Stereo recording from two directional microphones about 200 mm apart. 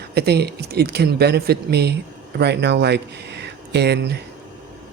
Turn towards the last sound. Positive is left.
turn(degrees=-55)  # may be behind; listen again after turning